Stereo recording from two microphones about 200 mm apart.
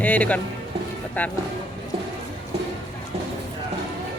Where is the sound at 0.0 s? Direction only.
5° left (ahead or behind).